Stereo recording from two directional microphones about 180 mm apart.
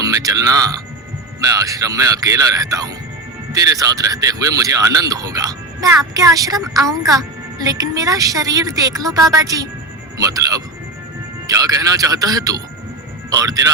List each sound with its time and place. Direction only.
0.0 s speech: 20° right (ahead or behind)